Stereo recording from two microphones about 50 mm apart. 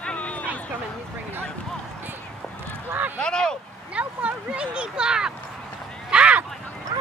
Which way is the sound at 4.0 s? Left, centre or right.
Right.